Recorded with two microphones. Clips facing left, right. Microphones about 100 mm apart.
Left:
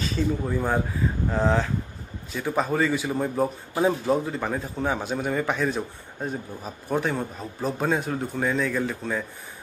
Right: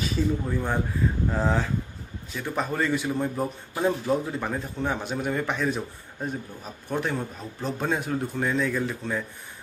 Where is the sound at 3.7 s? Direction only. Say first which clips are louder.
Left 1 dB; 15° left (ahead or behind).